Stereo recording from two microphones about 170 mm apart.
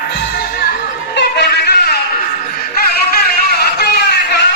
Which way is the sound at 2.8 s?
65° left (ahead or behind).